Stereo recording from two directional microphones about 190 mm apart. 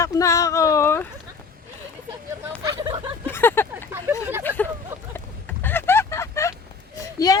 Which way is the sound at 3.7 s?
10° right (ahead or behind).